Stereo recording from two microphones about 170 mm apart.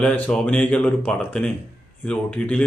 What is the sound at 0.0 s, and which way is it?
Speech, 5° left (ahead or behind).